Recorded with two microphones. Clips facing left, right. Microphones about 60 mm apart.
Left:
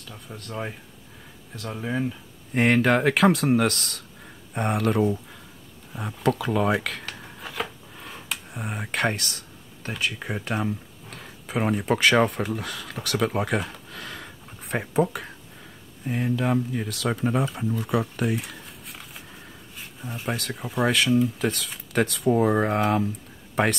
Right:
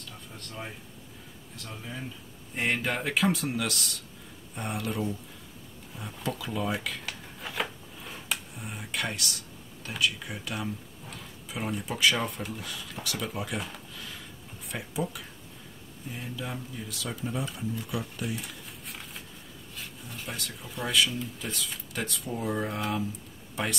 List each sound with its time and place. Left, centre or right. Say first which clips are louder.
0.5 s speech: left 8 dB; left
1.6 s speech: left 12 dB; left
7.1 s a sound: left 2 dB; centre
8.5 s speech: left 7 dB; left
11.1 s speech: left 4 dB; left
16.1 s speech: left 13 dB; left
20.2 s speech: left 10 dB; left